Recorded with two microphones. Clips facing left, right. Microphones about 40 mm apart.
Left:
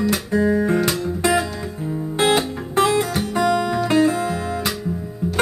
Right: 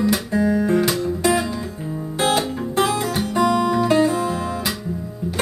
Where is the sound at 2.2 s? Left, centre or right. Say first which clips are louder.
Left 1 dB; left.